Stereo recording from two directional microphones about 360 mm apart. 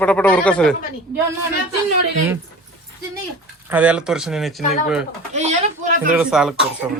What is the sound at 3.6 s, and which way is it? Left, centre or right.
Speech, centre.